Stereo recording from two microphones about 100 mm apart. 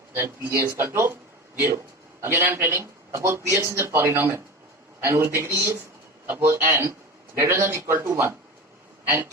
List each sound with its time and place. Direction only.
0.1 s a man's voice: 25° right (ahead or behind)